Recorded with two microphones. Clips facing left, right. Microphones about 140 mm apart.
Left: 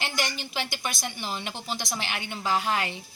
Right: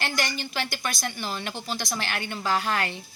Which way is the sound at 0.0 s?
15° left (ahead or behind).